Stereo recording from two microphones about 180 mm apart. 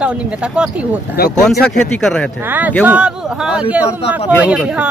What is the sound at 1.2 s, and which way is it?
Speech, 60° left (ahead or behind).